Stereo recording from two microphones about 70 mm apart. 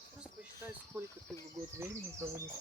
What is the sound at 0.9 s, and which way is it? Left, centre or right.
Cricket, right.